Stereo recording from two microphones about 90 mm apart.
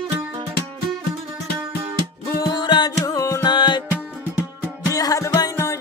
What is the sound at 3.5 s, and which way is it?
Music, 60° left (ahead or behind).